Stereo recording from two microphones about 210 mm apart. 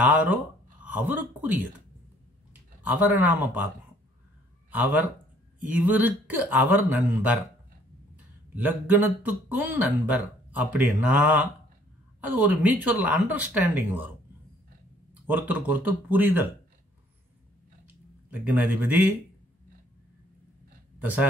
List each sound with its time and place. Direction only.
0.0 s speech: 10° right (ahead or behind)
3.1 s speech: 10° right (ahead or behind)
5.7 s speech: 10° right (ahead or behind)
8.5 s speech: 10° right (ahead or behind)
15.2 s speech: 10° right (ahead or behind)
18.3 s speech: 5° right (ahead or behind)
21.0 s speech: 10° right (ahead or behind)